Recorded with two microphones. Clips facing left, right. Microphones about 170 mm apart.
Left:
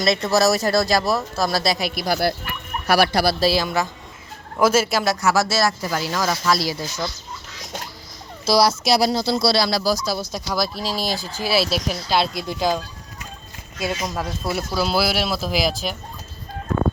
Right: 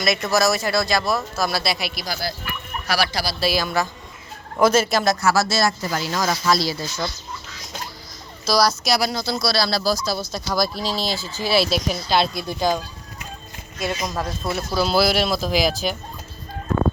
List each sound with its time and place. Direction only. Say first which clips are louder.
0.0 s speech: left 2 dB; 30° left (ahead or behind); by 3.3 s 55° left (ahead or behind)
3.4 s speech: left 2 dB; 25° left (ahead or behind)
4.6 s speech: right 1 dB; 5° left (ahead or behind)
5.5 s speech: even; 5° left (ahead or behind)
8.4 s speech: left 2 dB; 25° left (ahead or behind)
9.6 s speech: left 1 dB; 15° left (ahead or behind)
13.8 s speech: even; 5° left (ahead or behind)